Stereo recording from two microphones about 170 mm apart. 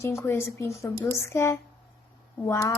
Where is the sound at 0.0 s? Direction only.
15° left (ahead or behind).